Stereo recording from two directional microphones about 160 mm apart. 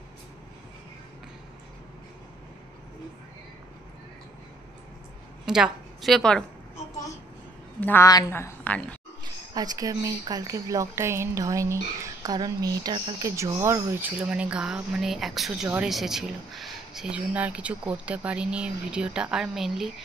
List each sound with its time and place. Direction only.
5.4 s a woman's voice: 5° right (ahead or behind)
7.8 s a woman's voice: 15° left (ahead or behind)
9.2 s speech: 25° right (ahead or behind)
13.4 s speech: 15° right (ahead or behind); by 19.9 s centre (ahead or behind)